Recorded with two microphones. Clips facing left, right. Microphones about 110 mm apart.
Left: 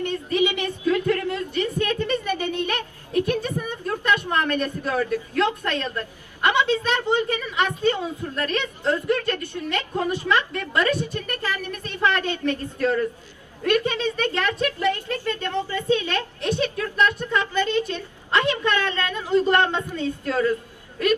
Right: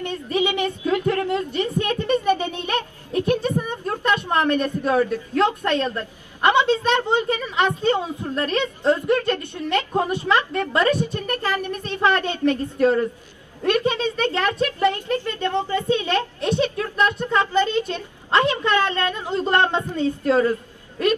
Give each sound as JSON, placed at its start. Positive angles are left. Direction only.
{"t": 0.7, "sound": "a sound", "side_deg": -25}
{"t": 4.6, "sound": "a woman's voice", "side_deg": -25}
{"t": 11.2, "sound": "speech", "side_deg": -40}
{"t": 11.8, "sound": "a woman's voice", "side_deg": -25}
{"t": 14.1, "sound": "speech", "side_deg": -40}
{"t": 14.6, "sound": "a woman's voice", "side_deg": -25}